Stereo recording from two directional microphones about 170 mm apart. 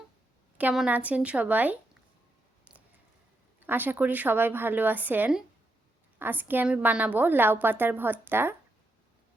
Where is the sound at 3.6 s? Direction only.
10° right (ahead or behind).